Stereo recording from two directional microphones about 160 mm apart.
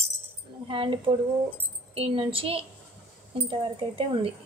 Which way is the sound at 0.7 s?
35° right (ahead or behind).